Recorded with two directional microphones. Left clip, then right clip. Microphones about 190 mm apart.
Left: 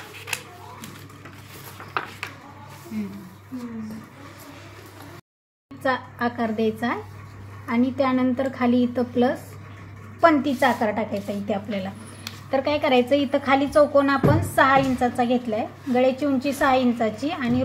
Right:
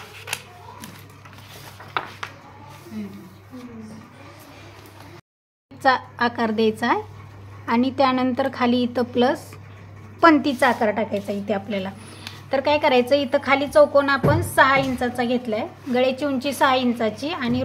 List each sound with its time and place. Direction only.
5.8 s a woman's voice: 30° right (ahead or behind)